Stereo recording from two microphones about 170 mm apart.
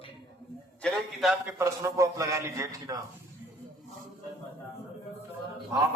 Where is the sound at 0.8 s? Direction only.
Centre (ahead or behind).